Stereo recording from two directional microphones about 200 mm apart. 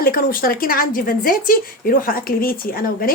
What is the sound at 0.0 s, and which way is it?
A woman's voice, 45° left (ahead or behind).